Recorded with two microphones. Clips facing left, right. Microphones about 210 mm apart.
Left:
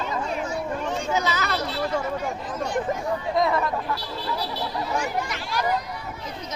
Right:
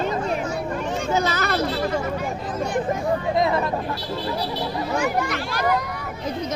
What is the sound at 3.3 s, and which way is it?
Speech, 25° right (ahead or behind).